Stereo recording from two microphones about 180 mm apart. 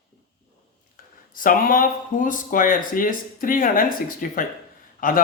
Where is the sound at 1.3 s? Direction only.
50° left (ahead or behind).